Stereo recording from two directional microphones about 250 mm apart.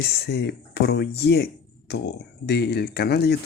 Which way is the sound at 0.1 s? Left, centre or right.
Left.